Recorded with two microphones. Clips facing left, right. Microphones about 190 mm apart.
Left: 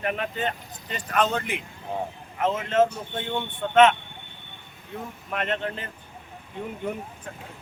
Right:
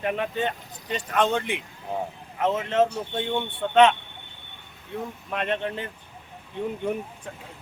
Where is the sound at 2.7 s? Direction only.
15° right (ahead or behind).